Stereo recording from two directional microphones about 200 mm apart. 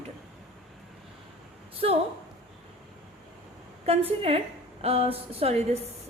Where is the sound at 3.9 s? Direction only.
30° right (ahead or behind).